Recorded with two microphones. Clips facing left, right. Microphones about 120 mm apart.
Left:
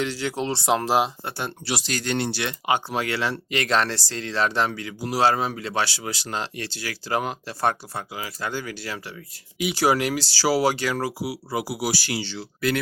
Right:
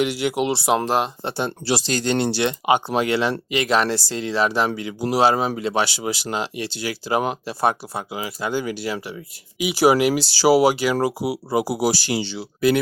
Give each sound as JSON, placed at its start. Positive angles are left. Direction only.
{"t": 0.0, "sound": "speech", "side_deg": -15}
{"t": 0.9, "sound": "speech", "side_deg": 5}
{"t": 1.2, "sound": "speech", "side_deg": -25}
{"t": 3.5, "sound": "speech", "side_deg": -5}
{"t": 4.7, "sound": "speech", "side_deg": -20}
{"t": 9.6, "sound": "speech", "side_deg": -5}
{"t": 9.8, "sound": "speech", "side_deg": -15}